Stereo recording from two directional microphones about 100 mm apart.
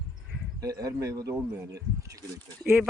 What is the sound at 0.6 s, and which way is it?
Speech, 35° right (ahead or behind).